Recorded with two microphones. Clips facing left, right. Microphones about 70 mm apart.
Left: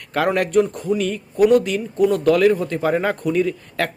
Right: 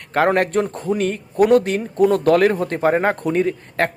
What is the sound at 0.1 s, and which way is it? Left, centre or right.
Speech, right.